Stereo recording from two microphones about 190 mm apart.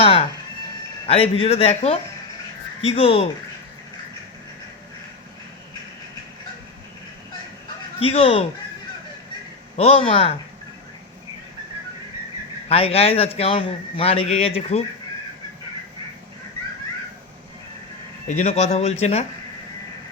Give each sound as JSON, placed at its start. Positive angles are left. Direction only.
{"t": 0.0, "sound": "a man's voice", "side_deg": 30}
{"t": 7.9, "sound": "speech", "side_deg": 30}
{"t": 9.7, "sound": "a man's voice", "side_deg": 30}
{"t": 12.6, "sound": "a man's voice", "side_deg": 30}
{"t": 18.3, "sound": "a man's voice", "side_deg": 35}